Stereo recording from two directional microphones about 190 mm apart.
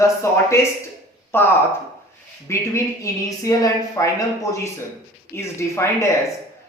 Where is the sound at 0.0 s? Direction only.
15° left (ahead or behind).